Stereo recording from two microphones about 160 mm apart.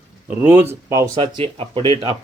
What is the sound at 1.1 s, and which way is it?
Speech, 35° right (ahead or behind).